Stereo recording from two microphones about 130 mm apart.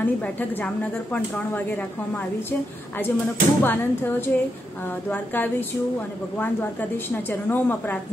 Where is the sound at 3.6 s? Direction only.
15° left (ahead or behind).